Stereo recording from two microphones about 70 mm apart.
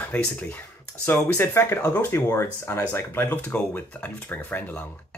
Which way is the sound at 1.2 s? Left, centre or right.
Left.